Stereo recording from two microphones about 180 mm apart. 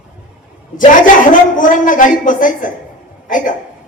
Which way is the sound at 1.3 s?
45° left (ahead or behind).